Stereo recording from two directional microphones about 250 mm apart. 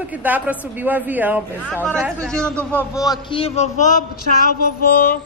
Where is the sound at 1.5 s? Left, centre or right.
Centre.